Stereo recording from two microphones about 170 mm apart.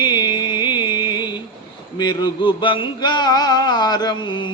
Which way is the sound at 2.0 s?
25° left (ahead or behind).